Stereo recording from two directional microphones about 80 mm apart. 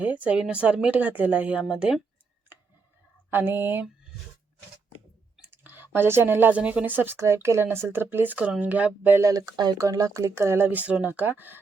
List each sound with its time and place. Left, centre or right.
0.0 s speech: centre
2.5 s a sound: right
3.2 s speech: right
5.5 s speech: right
9.3 s speech: right
9.7 s speech: right
10.7 s speech: centre